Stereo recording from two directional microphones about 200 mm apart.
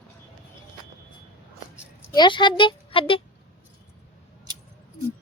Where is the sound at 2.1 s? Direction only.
25° left (ahead or behind).